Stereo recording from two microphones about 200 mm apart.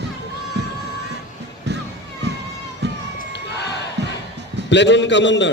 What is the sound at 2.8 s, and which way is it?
Run, 55° right (ahead or behind).